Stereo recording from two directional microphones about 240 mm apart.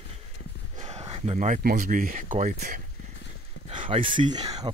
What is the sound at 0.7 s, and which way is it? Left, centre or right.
Speech, right.